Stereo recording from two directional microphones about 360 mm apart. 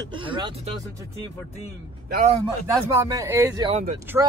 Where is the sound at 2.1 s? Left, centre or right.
Centre.